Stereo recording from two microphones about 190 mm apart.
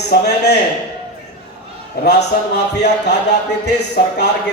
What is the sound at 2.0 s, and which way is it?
Speech, 60° left (ahead or behind).